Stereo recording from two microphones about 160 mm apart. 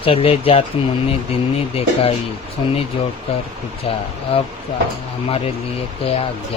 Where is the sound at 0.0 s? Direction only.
35° left (ahead or behind).